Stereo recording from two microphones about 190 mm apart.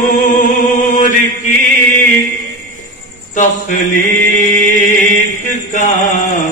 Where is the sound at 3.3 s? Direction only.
40° left (ahead or behind).